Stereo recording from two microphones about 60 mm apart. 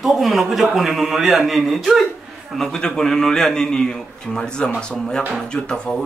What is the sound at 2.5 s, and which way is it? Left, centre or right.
A man's voice, centre.